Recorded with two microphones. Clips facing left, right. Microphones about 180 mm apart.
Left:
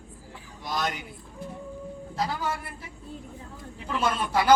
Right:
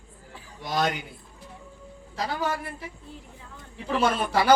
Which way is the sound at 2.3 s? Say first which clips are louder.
Right 2 dB; 65° right (ahead or behind).